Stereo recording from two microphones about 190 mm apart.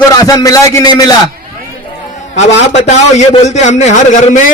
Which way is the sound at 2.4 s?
35° left (ahead or behind).